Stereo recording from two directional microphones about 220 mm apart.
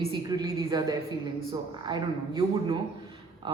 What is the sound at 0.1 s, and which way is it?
A woman's voice, 20° right (ahead or behind).